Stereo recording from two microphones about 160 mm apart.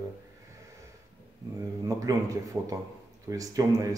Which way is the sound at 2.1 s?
20° right (ahead or behind).